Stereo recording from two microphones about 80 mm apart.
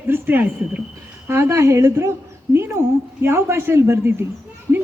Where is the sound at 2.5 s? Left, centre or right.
Right.